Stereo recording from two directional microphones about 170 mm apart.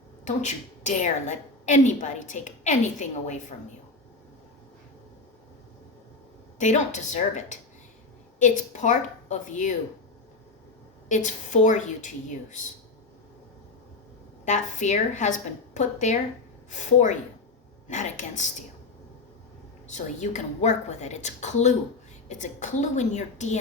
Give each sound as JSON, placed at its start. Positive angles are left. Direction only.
{"t": 0.3, "sound": "a woman's voice", "side_deg": 45}
{"t": 6.6, "sound": "a woman's voice", "side_deg": 45}
{"t": 11.1, "sound": "a woman's voice", "side_deg": 45}
{"t": 14.4, "sound": "a woman's voice", "side_deg": 45}
{"t": 19.9, "sound": "a woman's voice", "side_deg": 45}